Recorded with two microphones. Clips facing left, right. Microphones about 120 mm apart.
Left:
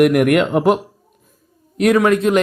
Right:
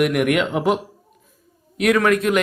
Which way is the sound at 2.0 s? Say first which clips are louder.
Left 3 dB; 25° left (ahead or behind).